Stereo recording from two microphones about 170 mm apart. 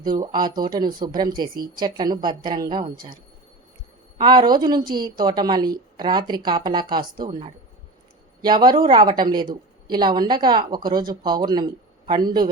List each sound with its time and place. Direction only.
0.2 s speech: 25° right (ahead or behind)
4.2 s speech: 25° right (ahead or behind)